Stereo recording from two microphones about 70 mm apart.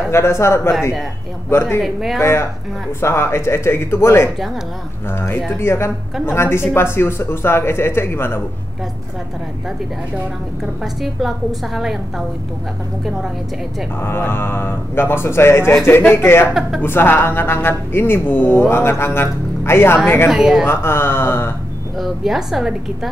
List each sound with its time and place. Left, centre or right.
0.1 s speech: left
1.8 s a woman's voice: centre
3.0 s speech: left
10.6 s a woman's voice: centre
14.0 s speech: left
16.4 s speech: centre
16.8 s speech: left
20.2 s speech: centre
20.6 s speech: left
21.9 s a woman's voice: centre